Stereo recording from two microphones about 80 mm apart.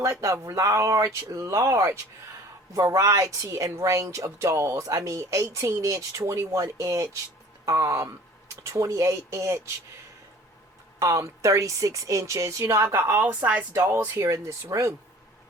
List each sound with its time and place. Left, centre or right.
0.0 s a woman's voice: right
11.0 s a woman's voice: right
13.2 s speech: centre
13.7 s a woman's voice: right